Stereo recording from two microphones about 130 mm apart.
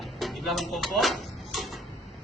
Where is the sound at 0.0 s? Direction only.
Centre (ahead or behind).